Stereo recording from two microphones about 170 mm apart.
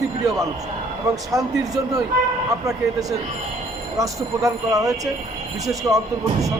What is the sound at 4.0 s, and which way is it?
Speech, 20° right (ahead or behind).